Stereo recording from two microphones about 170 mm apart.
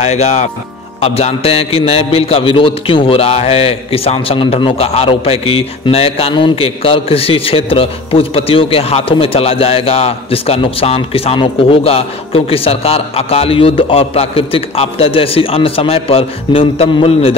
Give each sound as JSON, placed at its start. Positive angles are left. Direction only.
{"t": 0.0, "sound": "a man's voice", "side_deg": 40}